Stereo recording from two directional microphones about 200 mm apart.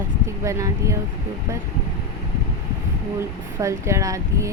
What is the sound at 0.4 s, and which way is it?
Speech, 15° right (ahead or behind).